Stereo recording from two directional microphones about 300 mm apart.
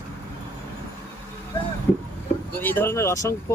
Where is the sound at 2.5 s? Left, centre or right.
Centre.